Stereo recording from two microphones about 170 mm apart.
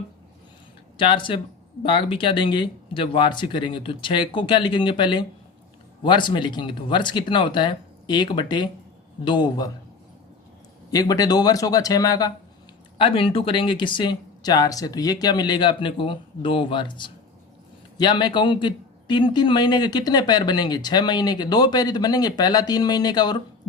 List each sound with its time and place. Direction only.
0.9 s speech: 30° left (ahead or behind)
10.9 s speech: 20° left (ahead or behind)